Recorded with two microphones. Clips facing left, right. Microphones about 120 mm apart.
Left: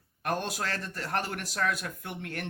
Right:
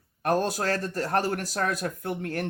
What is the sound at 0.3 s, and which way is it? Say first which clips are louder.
A man's voice: right 7 dB; 40° right (ahead or behind).